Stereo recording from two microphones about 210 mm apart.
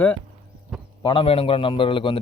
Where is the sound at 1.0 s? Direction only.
25° left (ahead or behind).